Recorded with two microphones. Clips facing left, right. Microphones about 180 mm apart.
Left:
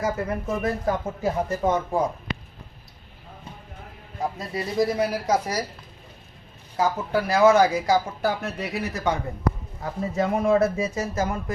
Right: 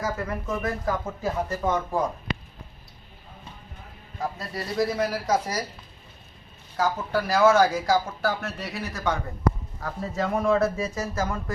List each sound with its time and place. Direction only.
0.0 s speech: 20° left (ahead or behind)
4.2 s speech: 20° left (ahead or behind)
7.1 s speech: 15° left (ahead or behind)